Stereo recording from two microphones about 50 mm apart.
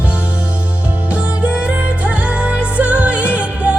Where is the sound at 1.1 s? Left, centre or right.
Right.